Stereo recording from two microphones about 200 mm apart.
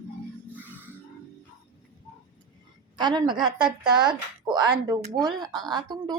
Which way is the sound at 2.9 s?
20° right (ahead or behind).